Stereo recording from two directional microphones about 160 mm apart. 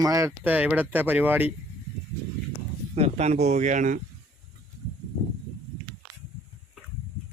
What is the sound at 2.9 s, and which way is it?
Speech, 45° right (ahead or behind).